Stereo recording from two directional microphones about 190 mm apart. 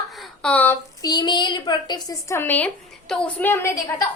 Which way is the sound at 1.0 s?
20° left (ahead or behind).